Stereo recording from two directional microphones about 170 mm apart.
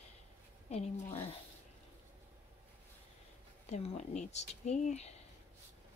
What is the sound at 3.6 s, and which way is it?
Speech, 40° left (ahead or behind).